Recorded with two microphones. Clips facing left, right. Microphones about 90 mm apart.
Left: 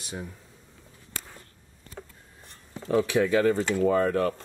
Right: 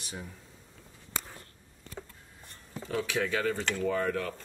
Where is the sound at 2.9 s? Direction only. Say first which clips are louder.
Left 8 dB; 30° left (ahead or behind).